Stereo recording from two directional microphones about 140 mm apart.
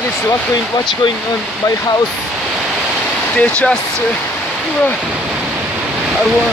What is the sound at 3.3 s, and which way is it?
Speech, 10° left (ahead or behind).